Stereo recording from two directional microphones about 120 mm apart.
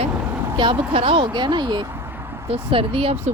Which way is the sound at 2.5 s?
50° right (ahead or behind).